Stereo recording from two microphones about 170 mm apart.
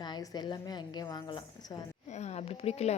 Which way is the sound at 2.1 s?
40° left (ahead or behind).